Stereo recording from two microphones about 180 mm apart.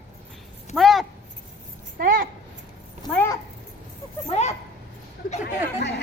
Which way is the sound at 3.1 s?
15° left (ahead or behind).